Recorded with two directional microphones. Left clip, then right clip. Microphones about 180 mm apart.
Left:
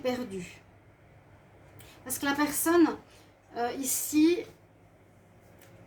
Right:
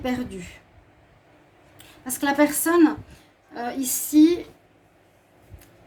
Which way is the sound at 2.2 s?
50° right (ahead or behind).